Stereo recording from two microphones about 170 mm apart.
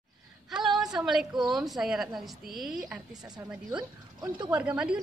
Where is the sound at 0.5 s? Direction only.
5° right (ahead or behind).